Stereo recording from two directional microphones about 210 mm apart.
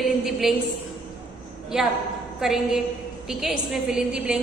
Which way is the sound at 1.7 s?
5° right (ahead or behind).